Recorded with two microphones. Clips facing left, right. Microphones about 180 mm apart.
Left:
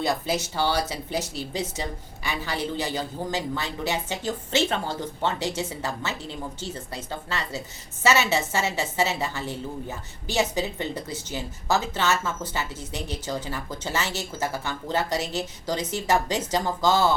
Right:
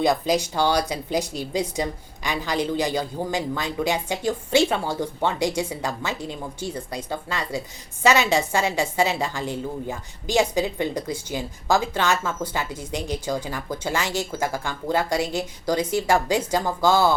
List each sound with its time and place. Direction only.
0.0 s a woman's voice: 15° right (ahead or behind)